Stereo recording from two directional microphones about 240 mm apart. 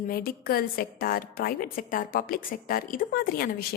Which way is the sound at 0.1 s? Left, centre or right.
Left.